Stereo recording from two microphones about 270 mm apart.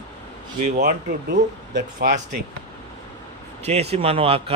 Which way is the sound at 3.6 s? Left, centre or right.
Right.